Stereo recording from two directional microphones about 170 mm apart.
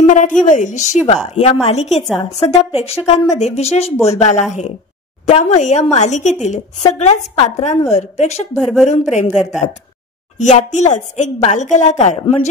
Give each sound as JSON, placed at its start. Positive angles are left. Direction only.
{"t": 0.0, "sound": "a woman's voice", "side_deg": 50}
{"t": 8.5, "sound": "speech", "side_deg": 0}
{"t": 10.3, "sound": "a woman's voice", "side_deg": 45}